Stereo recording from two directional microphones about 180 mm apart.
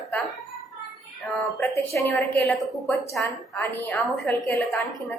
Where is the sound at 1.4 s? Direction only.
10° left (ahead or behind).